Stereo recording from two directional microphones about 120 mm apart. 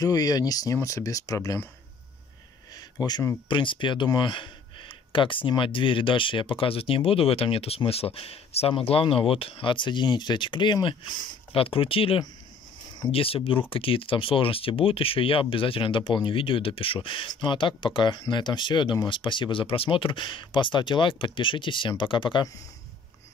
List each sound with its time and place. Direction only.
0.0 s speech: 30° left (ahead or behind)
2.7 s a sound: 35° left (ahead or behind)
3.4 s speech: 45° left (ahead or behind)